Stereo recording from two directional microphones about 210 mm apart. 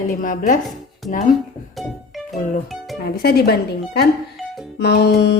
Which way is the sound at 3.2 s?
50° left (ahead or behind).